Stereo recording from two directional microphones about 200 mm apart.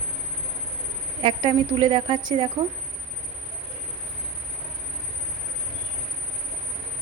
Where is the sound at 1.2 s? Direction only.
25° right (ahead or behind).